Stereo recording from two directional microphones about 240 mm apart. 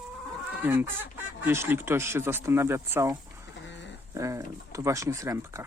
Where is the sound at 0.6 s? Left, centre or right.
Centre.